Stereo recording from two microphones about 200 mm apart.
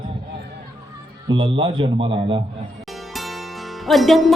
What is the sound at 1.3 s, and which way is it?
Speech, 25° right (ahead or behind).